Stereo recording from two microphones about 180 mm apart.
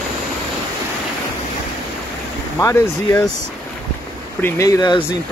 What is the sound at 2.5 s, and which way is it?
Speech, 15° left (ahead or behind).